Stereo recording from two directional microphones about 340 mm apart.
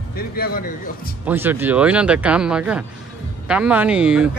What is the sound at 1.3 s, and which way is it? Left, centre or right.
Speech, centre.